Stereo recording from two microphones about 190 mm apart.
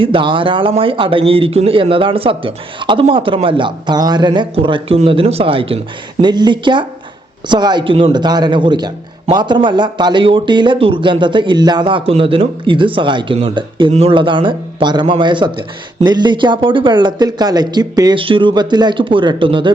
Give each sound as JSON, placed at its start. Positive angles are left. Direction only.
{"t": 0.0, "sound": "a man's voice", "side_deg": -25}